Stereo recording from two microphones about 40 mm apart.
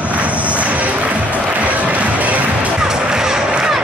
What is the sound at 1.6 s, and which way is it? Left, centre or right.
Music, right.